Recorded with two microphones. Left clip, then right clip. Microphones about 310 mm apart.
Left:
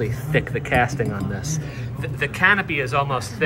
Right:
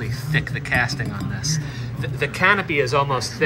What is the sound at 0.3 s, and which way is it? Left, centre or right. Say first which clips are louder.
Speech: left 1 dB; left.